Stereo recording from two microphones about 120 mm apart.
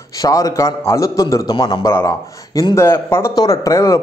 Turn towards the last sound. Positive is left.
turn(degrees=30)  # may be behind; listen again after turning